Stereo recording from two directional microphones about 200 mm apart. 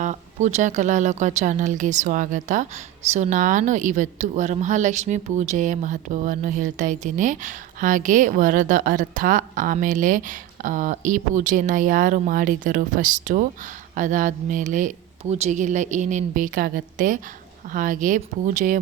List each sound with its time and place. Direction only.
0.0 s speech: 35° right (ahead or behind)